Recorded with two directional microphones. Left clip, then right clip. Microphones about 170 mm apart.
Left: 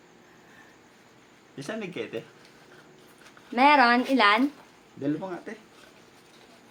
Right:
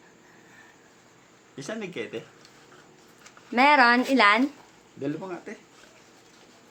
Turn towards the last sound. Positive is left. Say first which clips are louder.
# left 2 dB
turn(degrees=5)  # may be behind; listen again after turning